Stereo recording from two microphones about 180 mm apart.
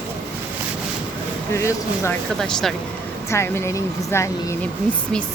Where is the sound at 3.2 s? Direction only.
15° left (ahead or behind).